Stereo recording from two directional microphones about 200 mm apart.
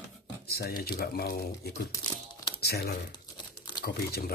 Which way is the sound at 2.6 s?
50° left (ahead or behind).